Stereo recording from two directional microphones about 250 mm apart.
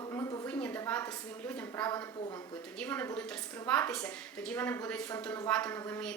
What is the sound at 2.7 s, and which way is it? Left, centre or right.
A woman's voice, centre.